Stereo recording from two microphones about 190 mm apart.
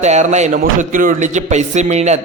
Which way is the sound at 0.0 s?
35° right (ahead or behind).